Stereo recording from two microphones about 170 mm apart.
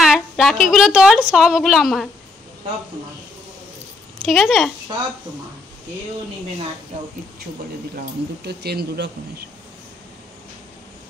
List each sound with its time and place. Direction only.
0.0 s a woman's voice: centre (ahead or behind)
4.2 s speech: centre (ahead or behind)
7.9 s speech: 65° right (ahead or behind)